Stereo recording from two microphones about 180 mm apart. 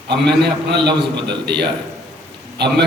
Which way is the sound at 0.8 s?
70° right (ahead or behind).